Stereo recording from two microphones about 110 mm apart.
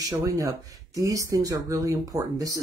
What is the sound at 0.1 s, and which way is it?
Speech, 30° right (ahead or behind).